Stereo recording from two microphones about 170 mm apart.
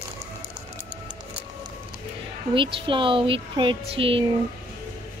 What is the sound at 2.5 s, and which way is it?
Speech, 30° right (ahead or behind).